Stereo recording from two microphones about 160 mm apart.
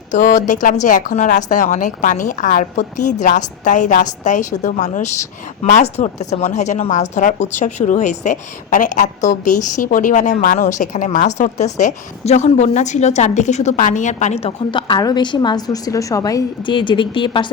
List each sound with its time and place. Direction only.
0.1 s a woman's voice: 55° left (ahead or behind); by 17.5 s 30° left (ahead or behind)